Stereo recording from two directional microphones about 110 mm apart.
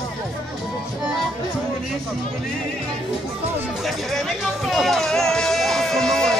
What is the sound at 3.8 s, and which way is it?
Music, centre (ahead or behind).